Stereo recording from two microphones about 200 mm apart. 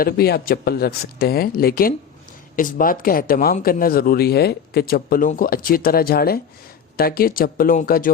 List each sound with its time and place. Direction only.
0.0 s speech: 50° left (ahead or behind)